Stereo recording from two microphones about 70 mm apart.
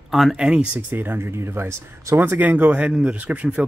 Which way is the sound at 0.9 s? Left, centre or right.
Right.